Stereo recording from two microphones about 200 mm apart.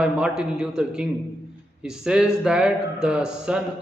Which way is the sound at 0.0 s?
5° right (ahead or behind).